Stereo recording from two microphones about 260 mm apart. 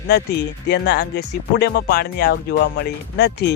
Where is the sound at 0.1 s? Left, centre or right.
Left.